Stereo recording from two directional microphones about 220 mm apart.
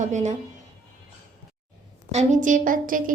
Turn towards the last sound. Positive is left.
turn(degrees=-40)  # may be behind; listen again after turning